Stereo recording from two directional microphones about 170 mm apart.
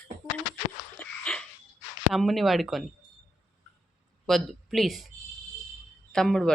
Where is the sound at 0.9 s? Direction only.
5° left (ahead or behind).